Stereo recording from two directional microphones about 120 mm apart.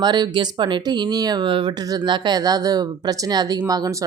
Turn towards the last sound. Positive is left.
turn(degrees=-30)  # may be behind; listen again after turning